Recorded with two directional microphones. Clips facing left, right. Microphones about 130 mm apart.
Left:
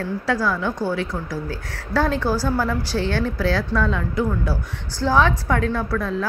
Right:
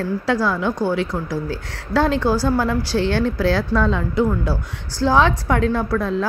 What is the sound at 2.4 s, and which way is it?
Speech, 20° right (ahead or behind).